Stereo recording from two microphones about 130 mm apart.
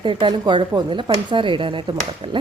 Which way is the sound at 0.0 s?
40° right (ahead or behind).